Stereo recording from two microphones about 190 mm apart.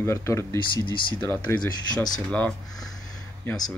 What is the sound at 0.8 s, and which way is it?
Speech, 25° left (ahead or behind).